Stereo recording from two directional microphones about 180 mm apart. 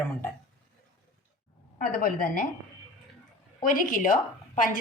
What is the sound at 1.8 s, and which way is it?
Speech, 50° left (ahead or behind).